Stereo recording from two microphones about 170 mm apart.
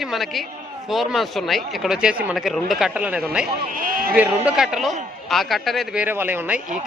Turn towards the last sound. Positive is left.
turn(degrees=-10)  # may be behind; listen again after turning